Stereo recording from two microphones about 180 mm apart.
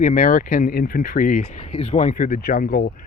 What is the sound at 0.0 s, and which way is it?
Speech, 50° left (ahead or behind).